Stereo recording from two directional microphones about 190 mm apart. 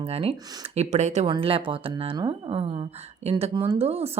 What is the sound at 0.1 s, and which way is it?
Speech, 30° right (ahead or behind).